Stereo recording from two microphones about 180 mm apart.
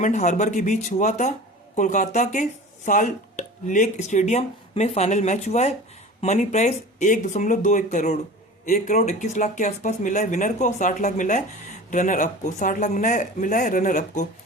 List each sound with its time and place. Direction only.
0.0 s speech: 40° left (ahead or behind)